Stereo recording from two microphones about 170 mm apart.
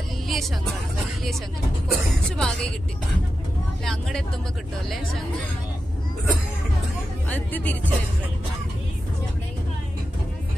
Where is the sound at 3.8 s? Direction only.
5° left (ahead or behind).